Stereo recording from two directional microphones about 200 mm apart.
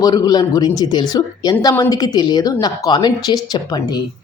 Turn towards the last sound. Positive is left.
turn(degrees=20)  # may be behind; listen again after turning